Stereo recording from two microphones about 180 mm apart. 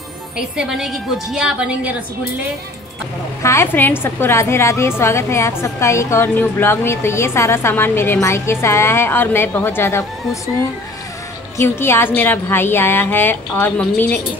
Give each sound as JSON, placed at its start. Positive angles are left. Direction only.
{"t": 0.4, "sound": "a woman's voice", "side_deg": -5}
{"t": 3.4, "sound": "a woman's voice", "side_deg": 15}
{"t": 11.8, "sound": "a woman's voice", "side_deg": 10}